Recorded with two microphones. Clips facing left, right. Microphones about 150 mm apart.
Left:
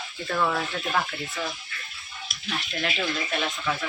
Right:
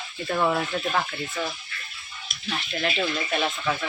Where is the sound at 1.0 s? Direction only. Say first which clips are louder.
Right 1 dB; centre (ahead or behind).